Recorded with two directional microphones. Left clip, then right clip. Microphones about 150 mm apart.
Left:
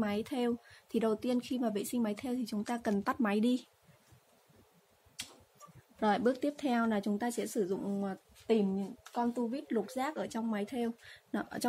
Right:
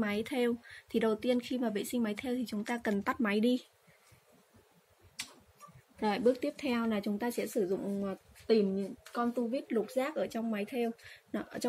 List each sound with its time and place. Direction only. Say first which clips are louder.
0.0 s speech: right 2 dB; 20° left (ahead or behind)
5.9 s speech: right 1 dB; 30° left (ahead or behind)